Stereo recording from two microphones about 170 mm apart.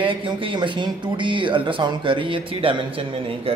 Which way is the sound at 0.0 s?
30° right (ahead or behind).